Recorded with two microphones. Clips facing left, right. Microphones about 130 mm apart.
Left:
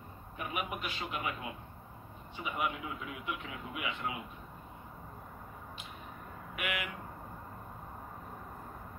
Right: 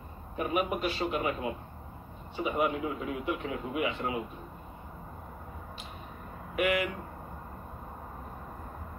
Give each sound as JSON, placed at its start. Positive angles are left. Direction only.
{"t": 0.4, "sound": "a man's voice", "side_deg": -40}
{"t": 6.5, "sound": "a man's voice", "side_deg": -35}